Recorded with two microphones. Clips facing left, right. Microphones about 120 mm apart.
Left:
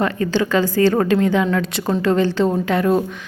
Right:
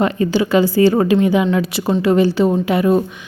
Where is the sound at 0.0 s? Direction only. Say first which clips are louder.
Right 3 dB; 15° right (ahead or behind).